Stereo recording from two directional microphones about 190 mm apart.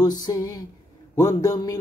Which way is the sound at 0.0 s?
20° left (ahead or behind).